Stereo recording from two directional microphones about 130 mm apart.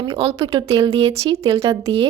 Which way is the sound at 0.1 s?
50° right (ahead or behind).